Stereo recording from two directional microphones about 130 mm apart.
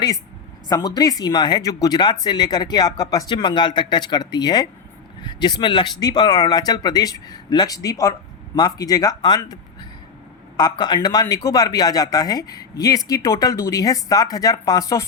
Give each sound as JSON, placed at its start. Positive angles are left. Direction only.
{"t": 0.7, "sound": "speech", "side_deg": 30}
{"t": 10.6, "sound": "speech", "side_deg": 35}